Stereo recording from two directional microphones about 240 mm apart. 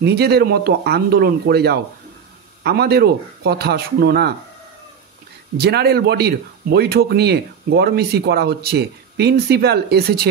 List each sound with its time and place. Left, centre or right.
0.0 s speech: right
5.6 s speech: right